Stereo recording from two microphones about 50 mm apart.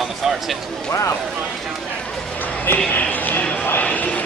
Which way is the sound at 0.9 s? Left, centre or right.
Left.